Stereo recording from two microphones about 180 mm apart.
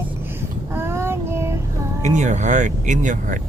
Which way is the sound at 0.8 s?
15° right (ahead or behind).